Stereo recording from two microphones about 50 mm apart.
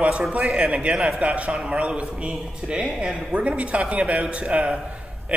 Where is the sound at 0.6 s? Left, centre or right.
Right.